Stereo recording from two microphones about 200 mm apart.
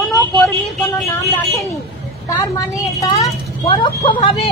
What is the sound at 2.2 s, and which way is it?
Speech, 15° left (ahead or behind).